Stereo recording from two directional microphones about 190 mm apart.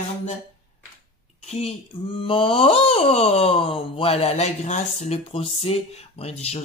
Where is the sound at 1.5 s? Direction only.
30° left (ahead or behind).